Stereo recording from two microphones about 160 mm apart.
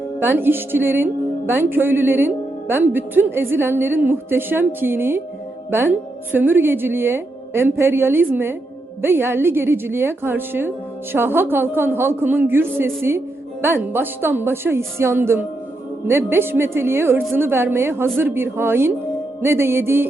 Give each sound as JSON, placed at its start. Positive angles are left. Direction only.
{"t": 0.2, "sound": "speech", "side_deg": -15}